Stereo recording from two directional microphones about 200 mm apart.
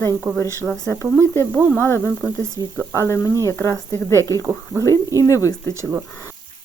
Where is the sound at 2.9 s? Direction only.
15° left (ahead or behind).